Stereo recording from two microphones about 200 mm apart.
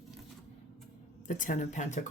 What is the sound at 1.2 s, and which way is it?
Speech, 40° left (ahead or behind).